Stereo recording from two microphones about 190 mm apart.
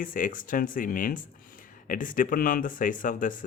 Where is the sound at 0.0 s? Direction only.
45° left (ahead or behind).